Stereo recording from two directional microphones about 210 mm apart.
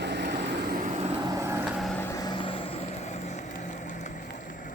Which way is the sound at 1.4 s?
10° right (ahead or behind).